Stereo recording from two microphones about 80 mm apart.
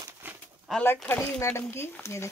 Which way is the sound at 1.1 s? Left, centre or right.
Left.